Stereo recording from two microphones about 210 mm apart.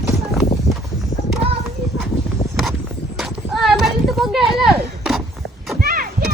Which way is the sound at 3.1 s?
Centre (ahead or behind).